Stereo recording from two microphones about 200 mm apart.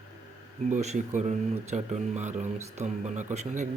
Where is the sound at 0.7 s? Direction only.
35° right (ahead or behind).